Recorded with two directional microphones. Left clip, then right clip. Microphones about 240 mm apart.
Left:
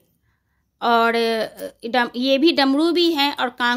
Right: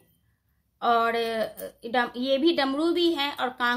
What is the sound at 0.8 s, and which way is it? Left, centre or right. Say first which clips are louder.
Speech: left 6 dB; left.